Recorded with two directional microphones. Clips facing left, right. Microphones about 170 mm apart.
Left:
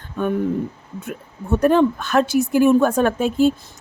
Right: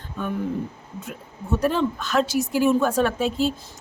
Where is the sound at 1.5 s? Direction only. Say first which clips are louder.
Left 7 dB; 55° left (ahead or behind).